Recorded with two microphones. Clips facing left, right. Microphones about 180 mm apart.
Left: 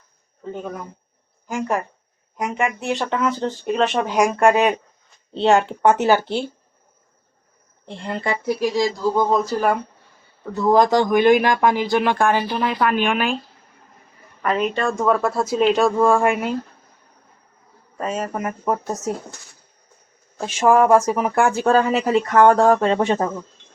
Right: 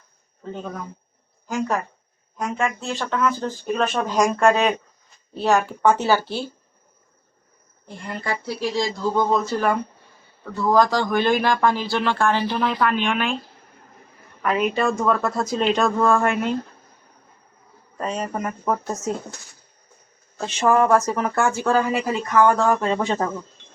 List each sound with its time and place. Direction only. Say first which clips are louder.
0.5 s speech: left 1 dB; 10° left (ahead or behind)
5.3 s speech: left 3 dB; 25° left (ahead or behind)
7.9 s speech: left 4 dB; 25° left (ahead or behind)
8.4 s speech: left 5 dB; 15° left (ahead or behind)
14.4 s speech: even; 5° right (ahead or behind)
15.1 s speech: left 3 dB; 10° left (ahead or behind)
17.9 s speech: left 1 dB; 5° left (ahead or behind)
20.4 s speech: left 3 dB; 10° left (ahead or behind)
22.4 s speech: left 6 dB; 70° left (ahead or behind)
22.8 s speech: left 4 dB; 25° left (ahead or behind)